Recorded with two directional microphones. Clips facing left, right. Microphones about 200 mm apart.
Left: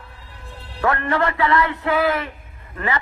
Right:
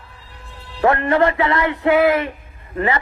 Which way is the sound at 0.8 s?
20° right (ahead or behind).